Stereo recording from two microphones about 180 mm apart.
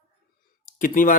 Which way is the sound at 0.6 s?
50° left (ahead or behind).